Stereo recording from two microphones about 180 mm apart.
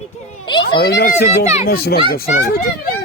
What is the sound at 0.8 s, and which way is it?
Speech, 60° left (ahead or behind).